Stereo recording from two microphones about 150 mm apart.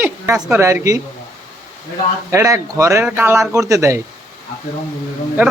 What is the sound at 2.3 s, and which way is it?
A man's voice, 20° right (ahead or behind).